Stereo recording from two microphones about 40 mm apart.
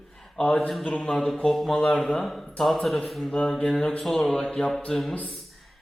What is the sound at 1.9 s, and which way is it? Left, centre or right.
Speech, centre.